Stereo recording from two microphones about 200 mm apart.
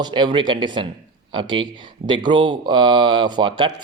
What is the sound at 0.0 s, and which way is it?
Speech, 25° right (ahead or behind).